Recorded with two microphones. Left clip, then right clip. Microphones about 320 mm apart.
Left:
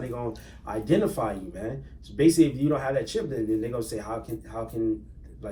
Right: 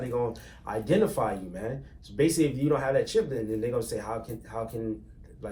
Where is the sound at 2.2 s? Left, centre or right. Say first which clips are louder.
Left 4 dB; centre.